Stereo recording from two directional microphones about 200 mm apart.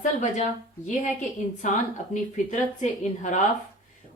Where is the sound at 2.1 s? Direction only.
35° left (ahead or behind).